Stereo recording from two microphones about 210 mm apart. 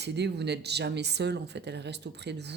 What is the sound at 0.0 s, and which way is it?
Speech, 55° right (ahead or behind).